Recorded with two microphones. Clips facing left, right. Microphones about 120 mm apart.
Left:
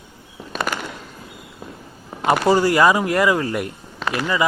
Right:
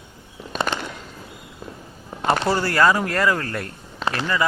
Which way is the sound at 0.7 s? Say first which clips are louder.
Left 1 dB; 10° left (ahead or behind).